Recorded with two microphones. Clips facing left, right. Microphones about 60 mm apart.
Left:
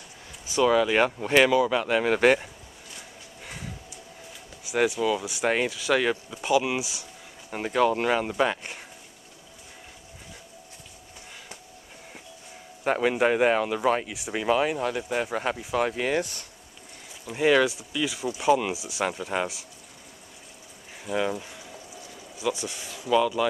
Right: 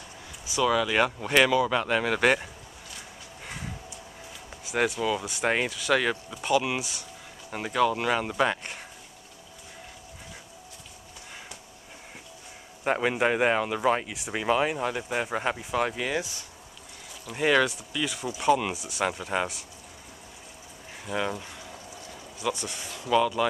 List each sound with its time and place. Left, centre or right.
0.7 s speech: centre
3.4 s a sound: centre
5.0 s speech: centre
5.7 s speech: left
5.9 s speech: centre
8.2 s speech: centre
12.8 s speech: centre
16.2 s speech: left
17.3 s speech: centre
19.0 s speech: centre
21.0 s speech: centre
23.0 s speech: centre